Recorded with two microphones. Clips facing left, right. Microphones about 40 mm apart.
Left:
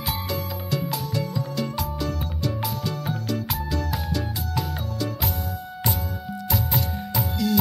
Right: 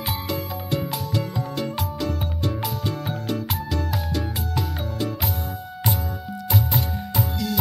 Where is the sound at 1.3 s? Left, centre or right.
Right.